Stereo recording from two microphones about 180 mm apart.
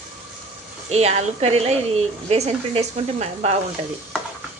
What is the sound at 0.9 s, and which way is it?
A woman's voice, 35° right (ahead or behind).